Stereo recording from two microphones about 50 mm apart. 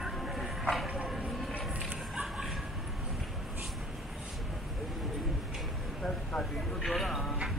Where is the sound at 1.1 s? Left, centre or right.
Right.